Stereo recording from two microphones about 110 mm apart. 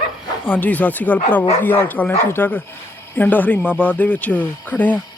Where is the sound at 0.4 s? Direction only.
15° left (ahead or behind).